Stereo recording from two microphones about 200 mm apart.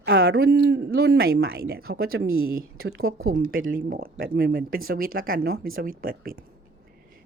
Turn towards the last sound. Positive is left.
turn(degrees=-45)  # may be behind; listen again after turning